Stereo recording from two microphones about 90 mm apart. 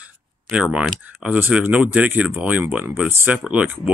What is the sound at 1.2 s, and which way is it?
Speech, 15° right (ahead or behind).